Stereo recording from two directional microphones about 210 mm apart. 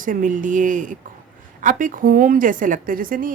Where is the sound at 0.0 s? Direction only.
40° right (ahead or behind).